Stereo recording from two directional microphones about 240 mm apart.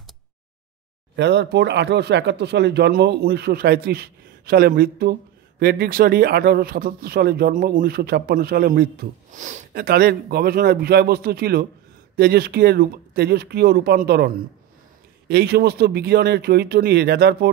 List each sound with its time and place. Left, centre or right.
1.1 s speech: right